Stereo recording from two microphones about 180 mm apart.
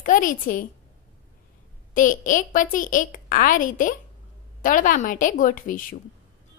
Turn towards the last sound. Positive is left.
turn(degrees=50)  # may be behind; listen again after turning